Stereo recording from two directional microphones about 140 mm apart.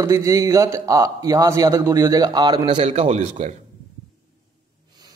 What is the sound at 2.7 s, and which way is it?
Speech, 50° right (ahead or behind).